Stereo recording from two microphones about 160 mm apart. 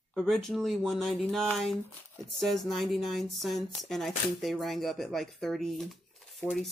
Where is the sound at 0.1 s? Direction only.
Centre (ahead or behind).